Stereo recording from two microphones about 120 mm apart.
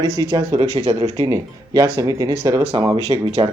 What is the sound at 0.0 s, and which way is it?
Speech, 30° right (ahead or behind).